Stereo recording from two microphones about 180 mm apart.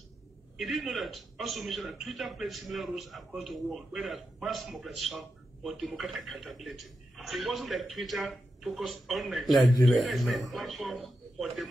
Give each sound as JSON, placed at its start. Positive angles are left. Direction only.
{"t": 0.6, "sound": "a man's voice", "side_deg": 0}